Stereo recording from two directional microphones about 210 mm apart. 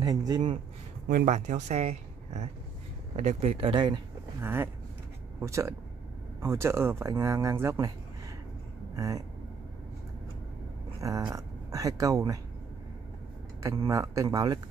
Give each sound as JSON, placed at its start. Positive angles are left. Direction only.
{"t": 0.0, "sound": "speech", "side_deg": -15}
{"t": 1.1, "sound": "speech", "side_deg": -35}
{"t": 8.9, "sound": "speech", "side_deg": -15}
{"t": 11.0, "sound": "speech", "side_deg": -15}
{"t": 13.6, "sound": "speech", "side_deg": -15}